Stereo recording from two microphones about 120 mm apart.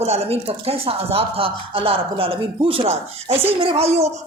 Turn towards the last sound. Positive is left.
turn(degrees=-60)  # may be behind; listen again after turning